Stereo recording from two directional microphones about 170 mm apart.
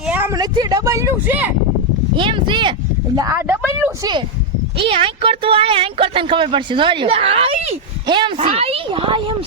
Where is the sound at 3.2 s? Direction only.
15° right (ahead or behind).